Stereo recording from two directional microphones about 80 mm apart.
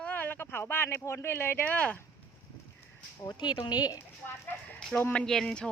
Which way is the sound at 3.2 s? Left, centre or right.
Left.